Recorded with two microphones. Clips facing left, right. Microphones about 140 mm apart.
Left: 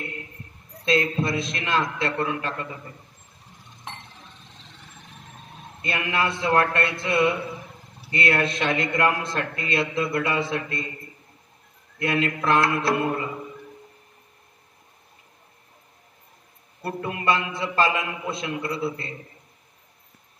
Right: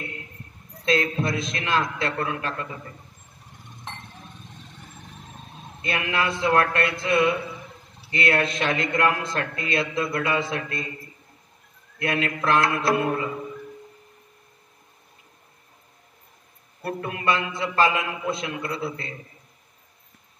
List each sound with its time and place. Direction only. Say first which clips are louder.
0.8 s a man's voice: even; 25° left (ahead or behind)
5.8 s a man's voice: even; 25° left (ahead or behind)
12.1 s a man's voice: left 1 dB; 30° left (ahead or behind)
16.8 s a man's voice: even; 25° left (ahead or behind)